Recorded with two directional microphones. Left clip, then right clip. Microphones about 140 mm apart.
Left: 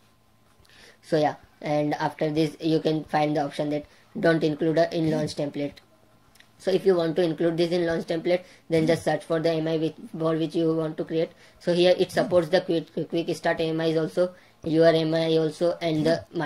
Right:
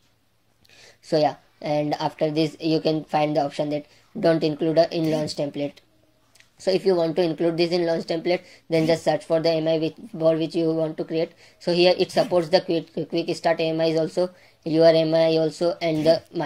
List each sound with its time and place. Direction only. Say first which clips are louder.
1.0 s a woman's voice: right 3 dB; 15° right (ahead or behind)